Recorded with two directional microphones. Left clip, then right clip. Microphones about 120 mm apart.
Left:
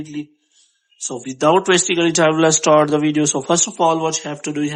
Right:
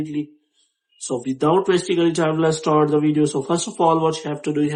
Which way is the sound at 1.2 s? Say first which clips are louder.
Left 4 dB; 35° left (ahead or behind).